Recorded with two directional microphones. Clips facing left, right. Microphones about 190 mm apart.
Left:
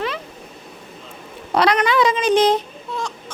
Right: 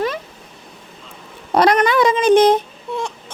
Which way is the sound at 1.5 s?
45° right (ahead or behind).